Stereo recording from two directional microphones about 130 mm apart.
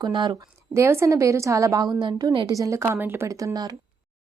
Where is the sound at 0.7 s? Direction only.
20° right (ahead or behind).